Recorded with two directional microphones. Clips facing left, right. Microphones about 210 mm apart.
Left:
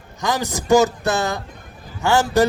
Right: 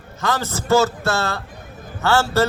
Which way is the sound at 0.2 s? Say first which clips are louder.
Left 1 dB; 15° left (ahead or behind).